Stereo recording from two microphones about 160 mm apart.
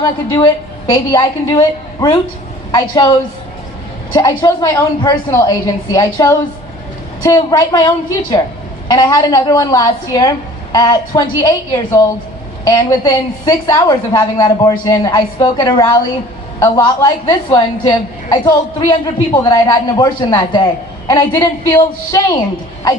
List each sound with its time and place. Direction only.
0.4 s a woman's voice: 25° left (ahead or behind)
8.9 s a woman's voice: 25° left (ahead or behind)